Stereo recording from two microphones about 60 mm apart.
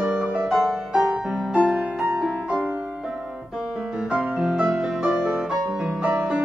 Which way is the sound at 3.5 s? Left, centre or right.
Centre.